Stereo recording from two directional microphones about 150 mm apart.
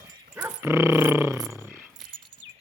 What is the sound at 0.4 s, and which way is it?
Dog, 15° right (ahead or behind).